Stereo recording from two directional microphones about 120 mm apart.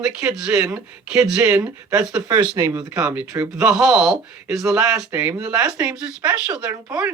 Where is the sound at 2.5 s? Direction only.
20° right (ahead or behind).